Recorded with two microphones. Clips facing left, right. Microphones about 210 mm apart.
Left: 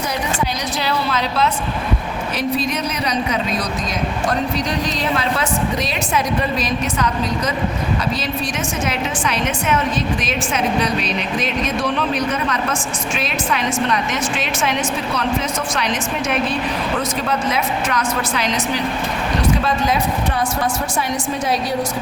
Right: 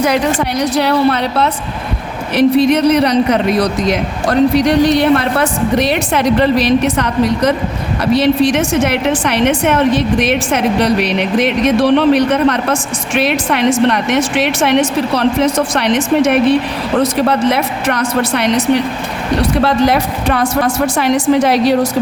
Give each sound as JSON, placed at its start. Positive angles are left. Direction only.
{"t": 0.6, "sound": "a woman's voice", "side_deg": -65}